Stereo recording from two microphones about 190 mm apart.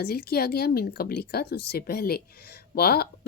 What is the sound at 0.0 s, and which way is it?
A woman's voice, 55° left (ahead or behind).